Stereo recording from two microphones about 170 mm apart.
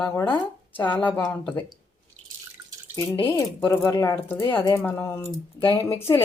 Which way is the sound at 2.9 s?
15° left (ahead or behind).